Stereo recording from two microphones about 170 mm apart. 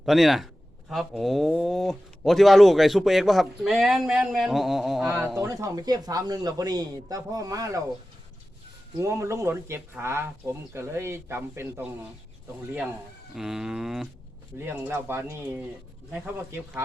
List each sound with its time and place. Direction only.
0.0 s speech: centre (ahead or behind); by 7.8 s 20° right (ahead or behind)
9.0 s speech: 15° right (ahead or behind)
13.3 s speech: centre (ahead or behind)
14.6 s speech: 15° right (ahead or behind)